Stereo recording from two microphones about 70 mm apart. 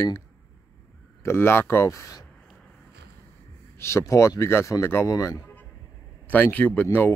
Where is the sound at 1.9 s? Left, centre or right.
Left.